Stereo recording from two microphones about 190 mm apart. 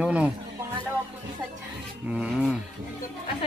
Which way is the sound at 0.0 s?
5° right (ahead or behind).